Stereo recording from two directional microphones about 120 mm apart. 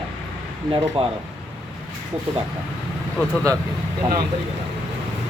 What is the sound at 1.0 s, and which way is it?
Speech, 50° right (ahead or behind).